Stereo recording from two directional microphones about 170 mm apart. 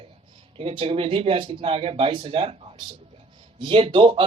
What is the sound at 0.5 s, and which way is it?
A man's voice, 30° right (ahead or behind).